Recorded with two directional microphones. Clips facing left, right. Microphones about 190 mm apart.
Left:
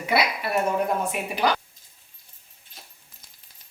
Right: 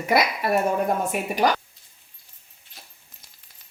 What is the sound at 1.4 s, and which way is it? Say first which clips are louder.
Speech: right 2 dB; 40° right (ahead or behind).